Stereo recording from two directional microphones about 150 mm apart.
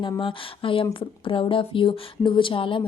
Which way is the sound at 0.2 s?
35° left (ahead or behind).